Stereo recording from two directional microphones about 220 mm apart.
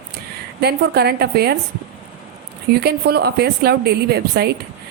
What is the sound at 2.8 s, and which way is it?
Speech, 45° right (ahead or behind).